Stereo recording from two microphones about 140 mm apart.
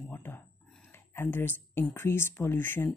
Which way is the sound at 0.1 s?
15° left (ahead or behind).